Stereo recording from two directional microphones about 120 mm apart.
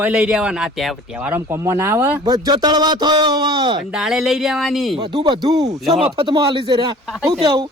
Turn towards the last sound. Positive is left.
turn(degrees=-35)  # may be behind; listen again after turning